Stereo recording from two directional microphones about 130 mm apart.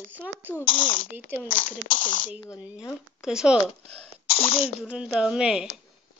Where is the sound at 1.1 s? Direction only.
15° right (ahead or behind).